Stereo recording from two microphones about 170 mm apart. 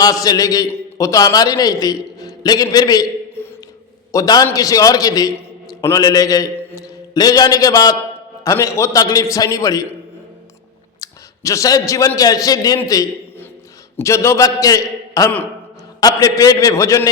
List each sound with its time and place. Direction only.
0.0 s a man's voice: 20° left (ahead or behind)
11.0 s a man's voice: 20° left (ahead or behind)